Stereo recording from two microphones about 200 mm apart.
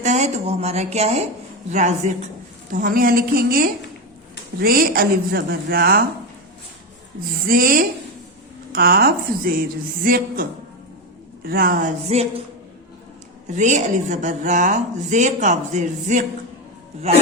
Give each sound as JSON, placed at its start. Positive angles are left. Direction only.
{"t": 0.0, "sound": "a woman's voice", "side_deg": -35}
{"t": 7.4, "sound": "a woman's voice", "side_deg": -45}
{"t": 11.4, "sound": "a woman's voice", "side_deg": -45}
{"t": 12.1, "sound": "a woman's voice", "side_deg": -30}
{"t": 13.5, "sound": "a woman's voice", "side_deg": -35}